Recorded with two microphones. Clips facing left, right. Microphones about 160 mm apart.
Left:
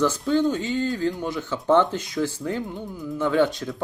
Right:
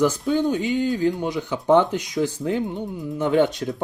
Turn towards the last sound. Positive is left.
turn(degrees=-20)  # may be behind; listen again after turning